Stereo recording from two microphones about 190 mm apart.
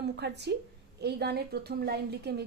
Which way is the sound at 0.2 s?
60° right (ahead or behind).